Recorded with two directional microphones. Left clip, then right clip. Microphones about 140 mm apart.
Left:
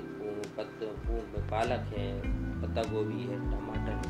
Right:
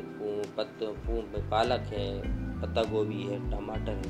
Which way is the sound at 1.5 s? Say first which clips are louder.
Right 4 dB; 25° right (ahead or behind).